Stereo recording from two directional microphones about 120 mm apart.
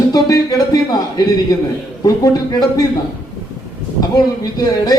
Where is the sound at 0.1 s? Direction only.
30° left (ahead or behind).